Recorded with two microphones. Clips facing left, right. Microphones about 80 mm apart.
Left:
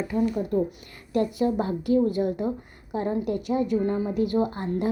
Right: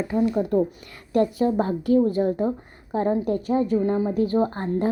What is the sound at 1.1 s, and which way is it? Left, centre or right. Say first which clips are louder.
A woman's voice: right 3 dB; right.